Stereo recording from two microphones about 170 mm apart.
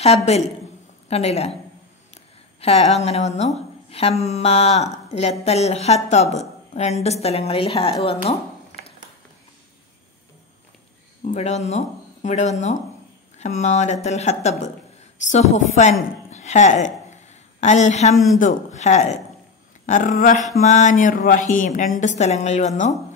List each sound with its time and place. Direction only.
0.0 s a woman's voice: 40° left (ahead or behind)
2.6 s a woman's voice: 35° left (ahead or behind)
11.2 s a woman's voice: 40° left (ahead or behind)